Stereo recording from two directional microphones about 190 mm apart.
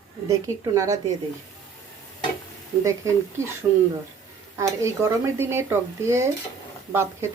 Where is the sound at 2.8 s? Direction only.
15° right (ahead or behind).